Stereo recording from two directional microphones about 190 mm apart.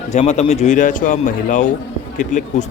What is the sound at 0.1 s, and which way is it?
Speech, 35° left (ahead or behind).